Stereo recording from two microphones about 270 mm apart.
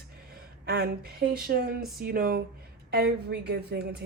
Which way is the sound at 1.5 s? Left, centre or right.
Right.